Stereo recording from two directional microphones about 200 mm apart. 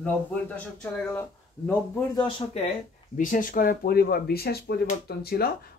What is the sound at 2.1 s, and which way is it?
Speech, 25° left (ahead or behind).